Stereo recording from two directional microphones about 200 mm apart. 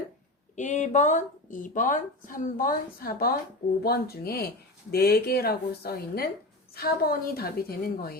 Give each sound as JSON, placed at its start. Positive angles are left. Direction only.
{"t": 0.5, "sound": "speech", "side_deg": 35}